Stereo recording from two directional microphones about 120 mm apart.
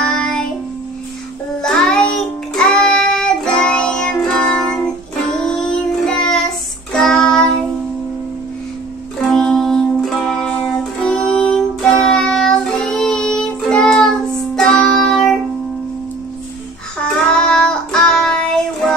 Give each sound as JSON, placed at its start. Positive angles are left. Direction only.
{"t": 0.0, "sound": "child singing", "side_deg": 5}
{"t": 1.6, "sound": "music", "side_deg": 5}
{"t": 5.4, "sound": "child singing", "side_deg": 5}
{"t": 9.2, "sound": "music", "side_deg": 5}
{"t": 17.3, "sound": "child singing", "side_deg": 5}